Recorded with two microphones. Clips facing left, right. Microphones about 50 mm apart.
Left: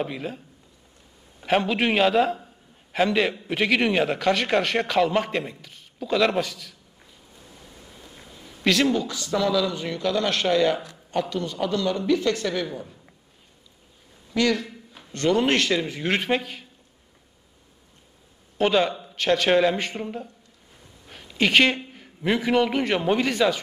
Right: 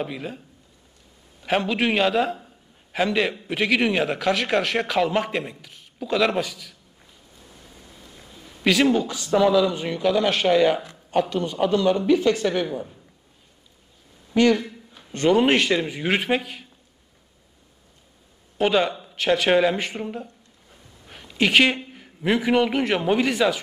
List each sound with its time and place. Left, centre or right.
0.0 s a man's voice: centre
1.4 s a man's voice: centre
8.9 s speech: right
14.3 s speech: right; by 16.6 s centre
18.6 s a man's voice: centre
21.1 s a sound: centre
21.9 s a man's voice: centre